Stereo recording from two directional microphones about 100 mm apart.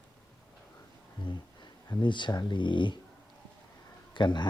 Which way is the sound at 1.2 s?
50° left (ahead or behind).